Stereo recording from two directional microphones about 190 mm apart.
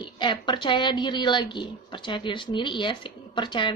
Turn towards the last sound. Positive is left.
turn(degrees=25)  # may be behind; listen again after turning